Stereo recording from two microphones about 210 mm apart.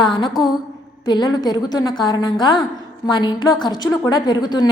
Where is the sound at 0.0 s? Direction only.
20° left (ahead or behind).